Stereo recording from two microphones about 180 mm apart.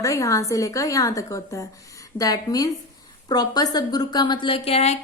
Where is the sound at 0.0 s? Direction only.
15° left (ahead or behind).